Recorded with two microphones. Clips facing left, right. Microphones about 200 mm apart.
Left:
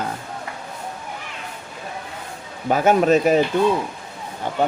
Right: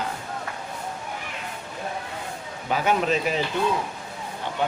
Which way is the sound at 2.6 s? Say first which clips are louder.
Left 7 dB; 45° left (ahead or behind).